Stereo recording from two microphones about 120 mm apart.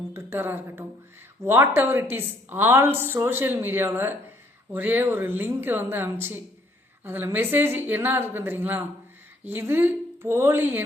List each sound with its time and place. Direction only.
0.1 s a woman's voice: 20° right (ahead or behind)